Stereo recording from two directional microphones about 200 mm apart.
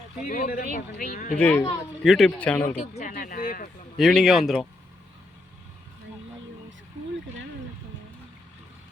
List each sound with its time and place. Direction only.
0.3 s speech: 45° left (ahead or behind)
1.4 s a man's voice: 5° left (ahead or behind)
2.8 s speech: 40° left (ahead or behind)
3.9 s speech: centre (ahead or behind)